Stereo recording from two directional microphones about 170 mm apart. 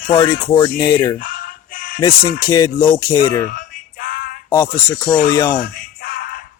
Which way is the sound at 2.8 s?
15° left (ahead or behind).